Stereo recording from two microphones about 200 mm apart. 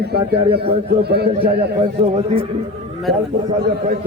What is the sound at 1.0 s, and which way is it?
Speech, 55° right (ahead or behind).